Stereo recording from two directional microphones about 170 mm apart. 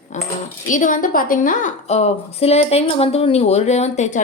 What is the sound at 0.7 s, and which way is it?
Speech, 50° left (ahead or behind).